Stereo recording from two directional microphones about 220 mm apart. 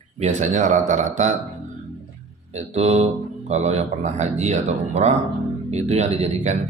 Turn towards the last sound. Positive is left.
turn(degrees=-30)  # may be behind; listen again after turning